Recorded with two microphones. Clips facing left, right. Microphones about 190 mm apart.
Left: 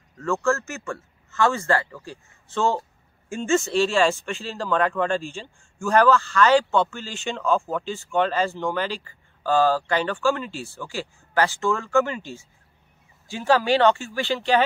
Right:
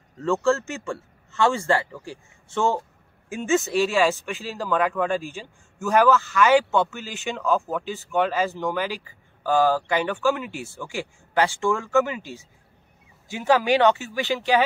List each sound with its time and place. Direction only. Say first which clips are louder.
0.2 s a man's voice: right 2 dB; 20° right (ahead or behind)